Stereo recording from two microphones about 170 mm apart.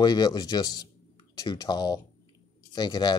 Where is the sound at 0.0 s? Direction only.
25° left (ahead or behind).